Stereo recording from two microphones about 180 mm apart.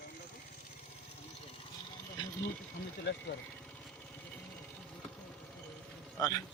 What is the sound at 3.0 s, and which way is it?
Speech, 70° left (ahead or behind).